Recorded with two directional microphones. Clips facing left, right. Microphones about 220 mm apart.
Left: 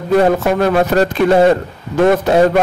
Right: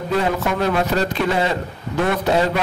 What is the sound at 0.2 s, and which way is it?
A man's voice, 50° left (ahead or behind).